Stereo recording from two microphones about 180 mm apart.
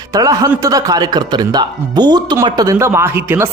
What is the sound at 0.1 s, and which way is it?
A man's voice, 20° right (ahead or behind).